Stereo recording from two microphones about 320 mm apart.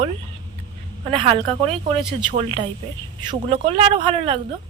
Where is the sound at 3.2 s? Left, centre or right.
Centre.